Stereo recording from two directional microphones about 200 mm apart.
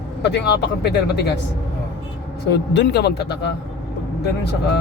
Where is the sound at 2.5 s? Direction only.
55° left (ahead or behind).